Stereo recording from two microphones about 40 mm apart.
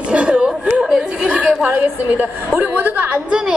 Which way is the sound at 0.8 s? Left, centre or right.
Centre.